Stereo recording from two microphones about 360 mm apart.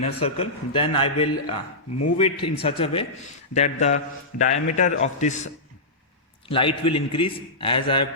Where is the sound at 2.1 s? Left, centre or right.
Centre.